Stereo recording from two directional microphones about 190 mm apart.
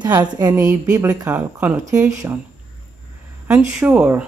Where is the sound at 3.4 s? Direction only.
5° right (ahead or behind).